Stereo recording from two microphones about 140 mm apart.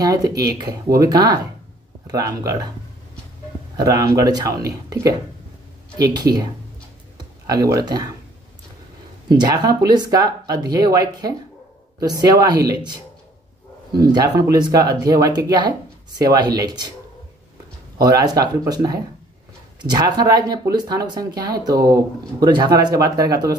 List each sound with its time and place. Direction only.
0.0 s speech: 25° right (ahead or behind)
3.7 s speech: 25° right (ahead or behind)
9.3 s speech: 30° right (ahead or behind)
17.9 s speech: 25° right (ahead or behind)